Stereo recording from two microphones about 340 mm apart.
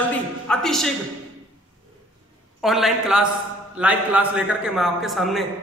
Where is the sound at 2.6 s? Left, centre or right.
Centre.